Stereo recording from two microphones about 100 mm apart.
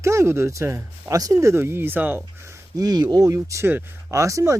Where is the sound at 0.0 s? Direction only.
30° right (ahead or behind).